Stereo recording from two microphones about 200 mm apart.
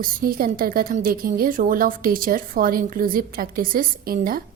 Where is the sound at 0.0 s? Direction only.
45° right (ahead or behind).